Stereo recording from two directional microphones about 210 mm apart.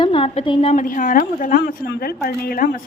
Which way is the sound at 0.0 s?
25° left (ahead or behind).